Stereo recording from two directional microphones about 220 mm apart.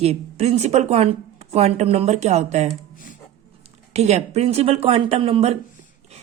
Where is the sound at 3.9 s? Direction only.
30° right (ahead or behind).